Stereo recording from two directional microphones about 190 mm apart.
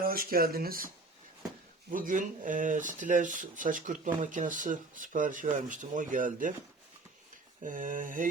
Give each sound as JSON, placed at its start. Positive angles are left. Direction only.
{"t": 0.0, "sound": "speech", "side_deg": -50}
{"t": 1.9, "sound": "speech", "side_deg": -45}
{"t": 7.6, "sound": "speech", "side_deg": -45}